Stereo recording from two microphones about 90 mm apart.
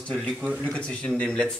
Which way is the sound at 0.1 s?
5° left (ahead or behind).